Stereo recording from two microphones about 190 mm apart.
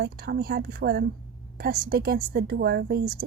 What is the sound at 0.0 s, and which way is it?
A woman's voice, 60° right (ahead or behind).